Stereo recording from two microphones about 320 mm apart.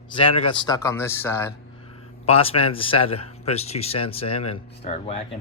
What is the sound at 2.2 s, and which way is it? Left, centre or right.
A man's voice, centre.